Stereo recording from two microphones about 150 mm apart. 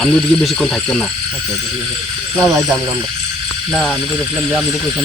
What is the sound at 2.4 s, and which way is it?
Speech, 20° right (ahead or behind).